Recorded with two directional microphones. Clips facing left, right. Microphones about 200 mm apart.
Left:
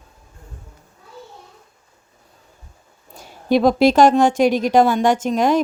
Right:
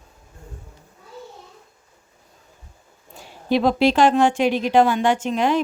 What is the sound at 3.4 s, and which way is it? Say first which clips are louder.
A woman's voice: left 3 dB; 45° left (ahead or behind).